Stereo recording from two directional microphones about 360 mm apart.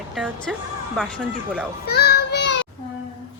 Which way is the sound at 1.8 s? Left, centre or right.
Left.